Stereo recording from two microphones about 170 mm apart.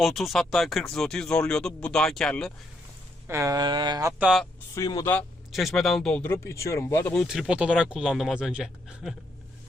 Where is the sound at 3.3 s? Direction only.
20° right (ahead or behind).